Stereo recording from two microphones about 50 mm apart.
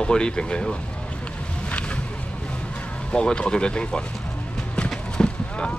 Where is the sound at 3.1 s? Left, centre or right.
Centre.